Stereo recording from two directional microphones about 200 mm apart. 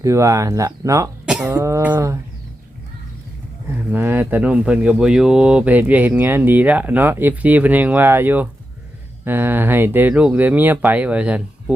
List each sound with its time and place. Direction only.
0.0 s speech: 15° right (ahead or behind)
1.2 s cough: 5° right (ahead or behind)
1.5 s speech: 15° right (ahead or behind)
3.7 s speech: 10° right (ahead or behind)